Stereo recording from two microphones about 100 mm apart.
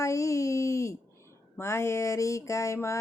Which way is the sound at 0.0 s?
30° left (ahead or behind).